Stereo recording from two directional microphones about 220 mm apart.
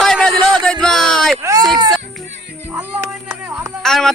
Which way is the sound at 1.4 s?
15° right (ahead or behind).